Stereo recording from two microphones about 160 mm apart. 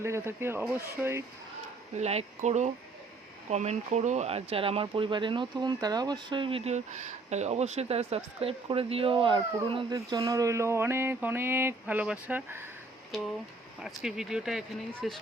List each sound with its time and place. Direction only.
0.0 s speech: 15° right (ahead or behind)
2.0 s speech: 45° right (ahead or behind); by 12.6 s 10° right (ahead or behind)
13.8 s speech: 5° right (ahead or behind)